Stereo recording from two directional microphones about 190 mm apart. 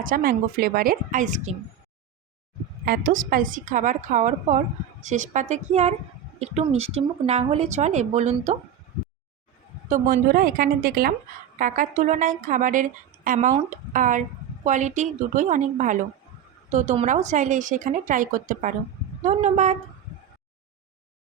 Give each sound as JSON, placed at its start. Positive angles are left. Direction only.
{"t": 0.0, "sound": "a woman's voice", "side_deg": -50}
{"t": 2.8, "sound": "a woman's voice", "side_deg": -50}
{"t": 9.9, "sound": "a woman's voice", "side_deg": -50}